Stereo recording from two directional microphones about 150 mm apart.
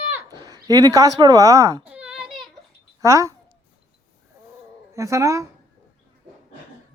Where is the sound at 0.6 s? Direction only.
25° right (ahead or behind).